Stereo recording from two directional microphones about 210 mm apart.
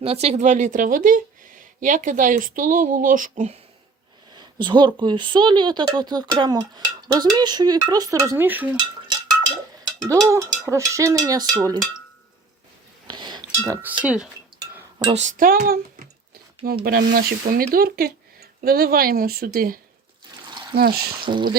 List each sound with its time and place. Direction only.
0.0 s speech: 30° right (ahead or behind)
4.4 s a sound: 20° right (ahead or behind)
4.9 s speech: 20° right (ahead or behind)
10.1 s cowbell: 15° right (ahead or behind)
13.1 s cowbell: 20° right (ahead or behind)
14.0 s speech: 5° right (ahead or behind)
14.7 s dishes: 10° right (ahead or behind)
15.0 s speech: 35° right (ahead or behind)
16.8 s speech: 45° right (ahead or behind)
20.5 s a sound: 20° right (ahead or behind)
20.7 s speech: 50° right (ahead or behind)
21.2 s speech: 20° right (ahead or behind)